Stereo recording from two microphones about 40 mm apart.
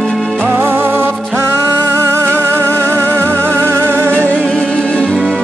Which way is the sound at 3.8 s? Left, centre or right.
Right.